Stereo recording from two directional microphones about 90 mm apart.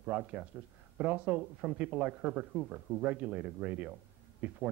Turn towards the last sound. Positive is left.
turn(degrees=-15)  # may be behind; listen again after turning